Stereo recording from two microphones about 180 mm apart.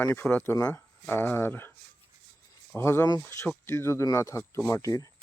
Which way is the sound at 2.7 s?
15° left (ahead or behind).